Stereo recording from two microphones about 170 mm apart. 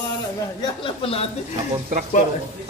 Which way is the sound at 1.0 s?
35° left (ahead or behind).